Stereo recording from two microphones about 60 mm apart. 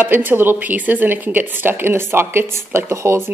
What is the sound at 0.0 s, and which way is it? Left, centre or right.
A woman's voice, right.